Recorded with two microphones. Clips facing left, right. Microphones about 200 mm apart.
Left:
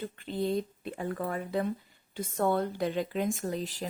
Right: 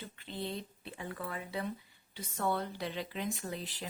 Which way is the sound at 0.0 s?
50° left (ahead or behind).